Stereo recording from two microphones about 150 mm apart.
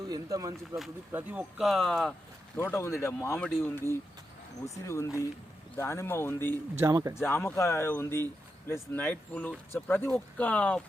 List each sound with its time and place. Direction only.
0.0 s speech: 25° right (ahead or behind)
1.1 s speech: 10° right (ahead or behind)
2.6 s speech: 20° left (ahead or behind)
6.7 s speech: 20° right (ahead or behind)
7.2 s speech: 15° left (ahead or behind)